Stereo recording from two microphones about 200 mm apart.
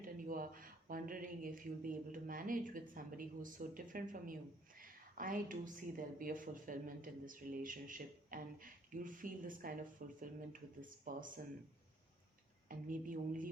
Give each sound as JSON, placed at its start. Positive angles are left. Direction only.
{"t": 0.0, "sound": "a woman's voice", "side_deg": -45}
{"t": 12.6, "sound": "a woman's voice", "side_deg": -45}